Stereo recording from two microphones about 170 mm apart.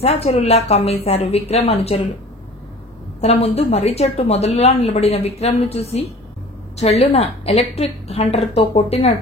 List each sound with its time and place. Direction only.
0.0 s a woman's voice: 35° left (ahead or behind)
3.2 s a woman's voice: 40° left (ahead or behind)